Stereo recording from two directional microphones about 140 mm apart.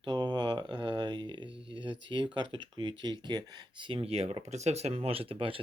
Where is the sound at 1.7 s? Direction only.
35° right (ahead or behind).